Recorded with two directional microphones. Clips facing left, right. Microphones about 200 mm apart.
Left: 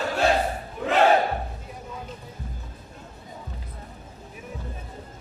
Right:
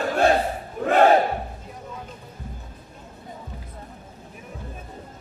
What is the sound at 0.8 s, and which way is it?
Battle cry, 45° right (ahead or behind).